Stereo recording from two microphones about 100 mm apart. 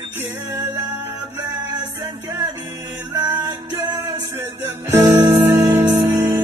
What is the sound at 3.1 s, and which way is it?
Music, 40° right (ahead or behind).